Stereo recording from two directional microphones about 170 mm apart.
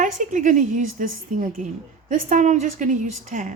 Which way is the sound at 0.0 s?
50° right (ahead or behind).